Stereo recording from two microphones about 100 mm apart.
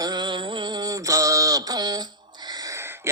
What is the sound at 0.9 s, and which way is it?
Mantra, 35° right (ahead or behind).